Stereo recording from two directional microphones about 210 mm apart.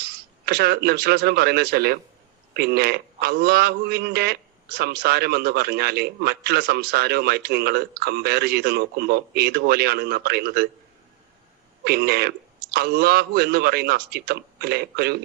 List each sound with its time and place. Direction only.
0.0 s a man's voice: 50° right (ahead or behind)
11.9 s a man's voice: 50° right (ahead or behind)